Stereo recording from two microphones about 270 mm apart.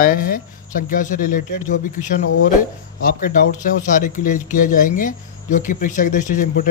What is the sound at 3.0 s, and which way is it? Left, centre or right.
Speech, left.